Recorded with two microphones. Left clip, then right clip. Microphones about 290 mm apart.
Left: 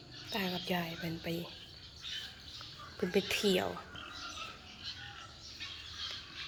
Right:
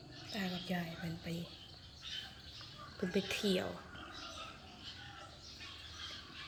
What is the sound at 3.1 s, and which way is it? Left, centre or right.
Speech, centre.